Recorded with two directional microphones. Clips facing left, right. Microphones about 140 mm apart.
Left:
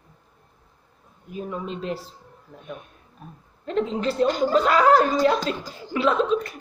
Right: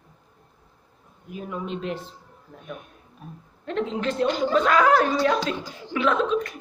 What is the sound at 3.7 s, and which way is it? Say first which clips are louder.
Speech: left 2 dB; centre (ahead or behind).